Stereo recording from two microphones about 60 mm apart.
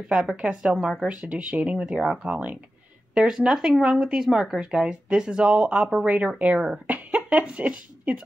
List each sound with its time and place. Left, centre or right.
0.1 s speech: centre
0.7 s speech: centre
1.0 s speech: centre
3.2 s speech: centre